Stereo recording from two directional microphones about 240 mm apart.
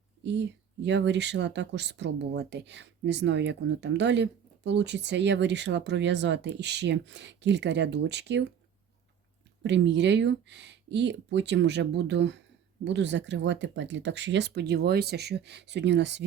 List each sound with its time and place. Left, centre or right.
0.2 s speech: right
9.6 s speech: right